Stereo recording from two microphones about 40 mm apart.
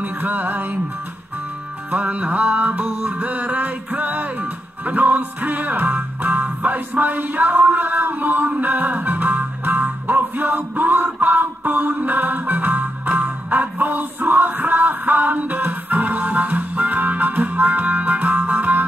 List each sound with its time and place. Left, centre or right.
0.2 s music: right
1.9 s music: right
6.6 s a sound: right